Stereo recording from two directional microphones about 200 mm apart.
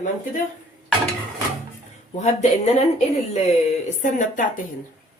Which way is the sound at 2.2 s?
35° left (ahead or behind).